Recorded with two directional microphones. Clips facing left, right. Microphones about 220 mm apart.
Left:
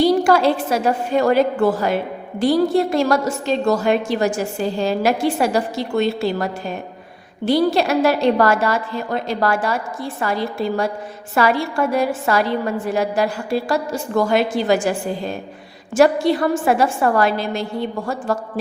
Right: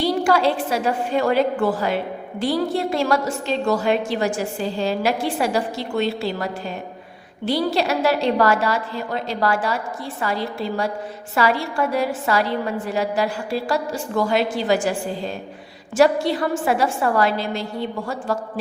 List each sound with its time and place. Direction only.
0.0 s a woman's voice: 45° left (ahead or behind)
16.0 s a woman's voice: 50° left (ahead or behind)